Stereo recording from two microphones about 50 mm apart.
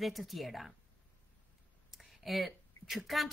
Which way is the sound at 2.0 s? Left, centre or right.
Centre.